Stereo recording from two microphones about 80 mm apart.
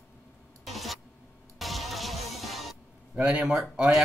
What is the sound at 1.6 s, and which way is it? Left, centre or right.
Music, centre.